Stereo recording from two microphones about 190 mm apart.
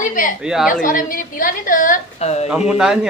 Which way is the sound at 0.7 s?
45° left (ahead or behind).